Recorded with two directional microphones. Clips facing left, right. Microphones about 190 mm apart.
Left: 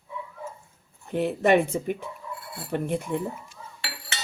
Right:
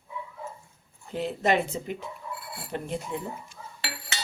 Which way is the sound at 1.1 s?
60° left (ahead or behind).